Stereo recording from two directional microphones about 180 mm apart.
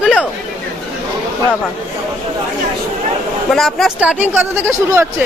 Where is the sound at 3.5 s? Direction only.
Centre (ahead or behind).